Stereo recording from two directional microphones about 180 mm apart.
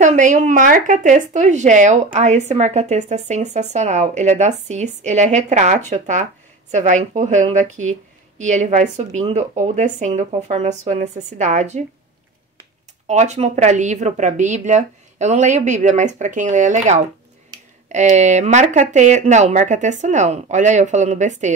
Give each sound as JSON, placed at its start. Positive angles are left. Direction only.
{"t": 0.0, "sound": "speech", "side_deg": -40}
{"t": 13.0, "sound": "speech", "side_deg": -40}